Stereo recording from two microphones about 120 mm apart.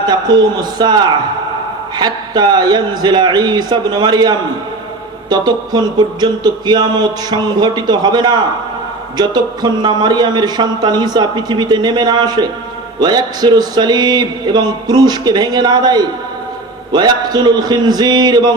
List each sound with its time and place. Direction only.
0.1 s speech: 35° right (ahead or behind)